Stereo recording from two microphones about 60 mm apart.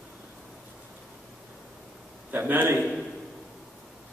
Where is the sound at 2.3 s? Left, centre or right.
Right.